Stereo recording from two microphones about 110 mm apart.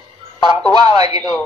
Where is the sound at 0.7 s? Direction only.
40° right (ahead or behind).